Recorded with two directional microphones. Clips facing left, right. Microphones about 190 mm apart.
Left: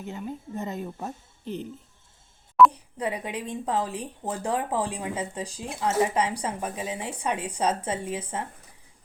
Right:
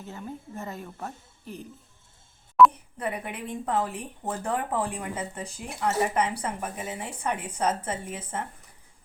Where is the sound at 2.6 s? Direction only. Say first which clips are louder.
Even; centre (ahead or behind).